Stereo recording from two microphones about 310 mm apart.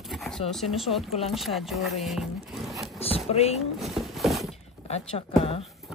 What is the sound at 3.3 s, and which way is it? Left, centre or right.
Speech, left.